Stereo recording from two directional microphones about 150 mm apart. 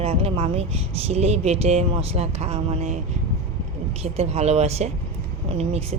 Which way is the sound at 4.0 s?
45° right (ahead or behind).